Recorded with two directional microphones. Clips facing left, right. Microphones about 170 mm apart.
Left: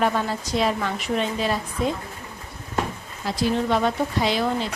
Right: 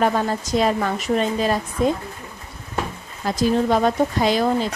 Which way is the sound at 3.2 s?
45° right (ahead or behind).